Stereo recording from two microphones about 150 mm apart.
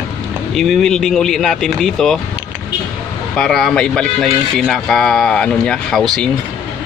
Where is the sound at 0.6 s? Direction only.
Centre (ahead or behind).